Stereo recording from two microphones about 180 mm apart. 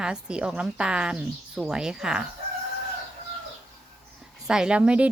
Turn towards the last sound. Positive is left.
turn(degrees=-5)  # may be behind; listen again after turning